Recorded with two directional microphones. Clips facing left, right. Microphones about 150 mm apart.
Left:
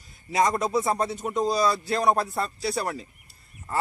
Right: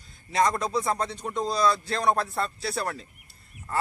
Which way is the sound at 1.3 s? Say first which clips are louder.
Left 1 dB; 5° left (ahead or behind).